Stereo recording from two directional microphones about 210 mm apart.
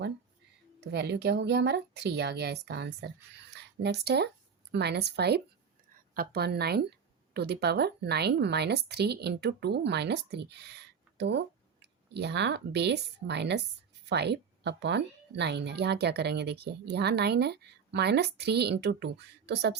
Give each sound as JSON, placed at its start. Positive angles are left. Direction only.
{"t": 0.8, "sound": "speech", "side_deg": -55}